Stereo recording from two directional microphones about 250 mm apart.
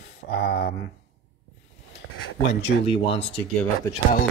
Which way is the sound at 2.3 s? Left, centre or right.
Left.